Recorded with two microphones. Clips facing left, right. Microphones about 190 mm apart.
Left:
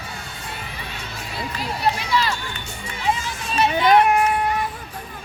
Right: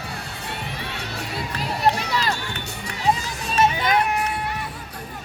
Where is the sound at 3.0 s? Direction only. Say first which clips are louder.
Right 2 dB; 40° right (ahead or behind).